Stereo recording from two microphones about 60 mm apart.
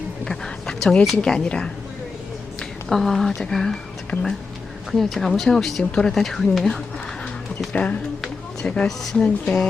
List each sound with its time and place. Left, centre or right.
0.3 s a sound: centre
1.5 s speech: centre
7.7 s speech: left